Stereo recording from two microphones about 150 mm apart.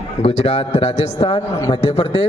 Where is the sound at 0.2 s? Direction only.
45° left (ahead or behind).